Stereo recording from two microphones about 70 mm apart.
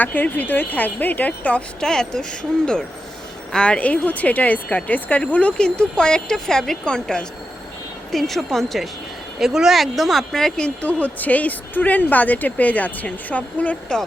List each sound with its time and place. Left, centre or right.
0.0 s speech: left
1.8 s speech: centre
3.5 s speech: centre
10.8 s speech: left